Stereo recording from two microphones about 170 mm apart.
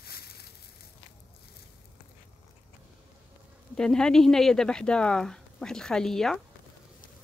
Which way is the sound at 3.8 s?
5° left (ahead or behind).